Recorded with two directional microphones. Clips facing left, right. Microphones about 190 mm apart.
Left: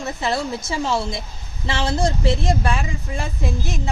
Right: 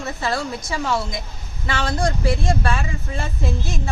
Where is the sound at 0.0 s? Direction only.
20° left (ahead or behind).